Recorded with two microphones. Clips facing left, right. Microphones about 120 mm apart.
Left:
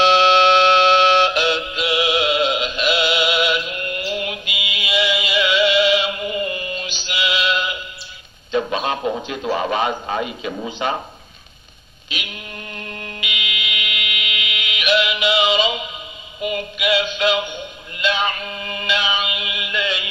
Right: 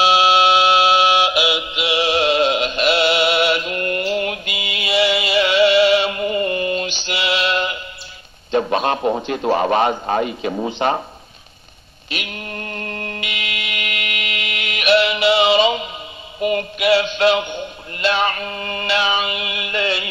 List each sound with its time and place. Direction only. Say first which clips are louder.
0.0 s music: left 1 dB; 10° right (ahead or behind)
2.0 s music: right 4 dB; 35° right (ahead or behind)
8.5 s a man's voice: right 3 dB; 40° right (ahead or behind)
12.1 s fire alarm: right 4 dB; 45° right (ahead or behind)
16.3 s a man's voice: right 5 dB; 45° right (ahead or behind)
17.9 s music: right 3 dB; 40° right (ahead or behind)